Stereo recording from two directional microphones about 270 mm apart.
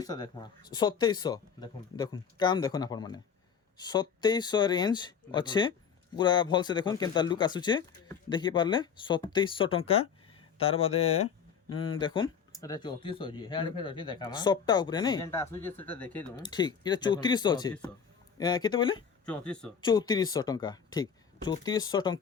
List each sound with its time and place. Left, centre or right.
0.0 s speech: centre
19.2 s speech: centre
19.8 s speech: centre